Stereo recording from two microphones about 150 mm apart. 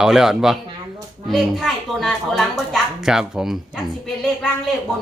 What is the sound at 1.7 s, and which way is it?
A man's voice, centre (ahead or behind).